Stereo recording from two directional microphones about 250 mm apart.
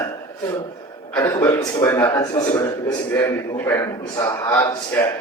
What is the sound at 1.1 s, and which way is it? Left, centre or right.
Speech, centre.